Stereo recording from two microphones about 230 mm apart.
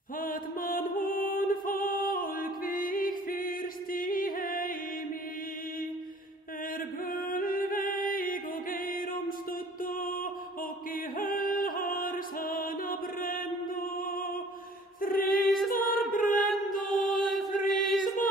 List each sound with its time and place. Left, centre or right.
0.2 s music: left
7.1 s music: left
11.1 s music: left
15.0 s a capella: left
15.3 s a capella: centre
15.7 s a capella: left
16.7 s music: left
17.1 s chant: centre
17.9 s a sound: left